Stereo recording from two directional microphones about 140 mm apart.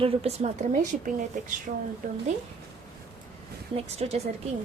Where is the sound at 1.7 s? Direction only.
75° right (ahead or behind).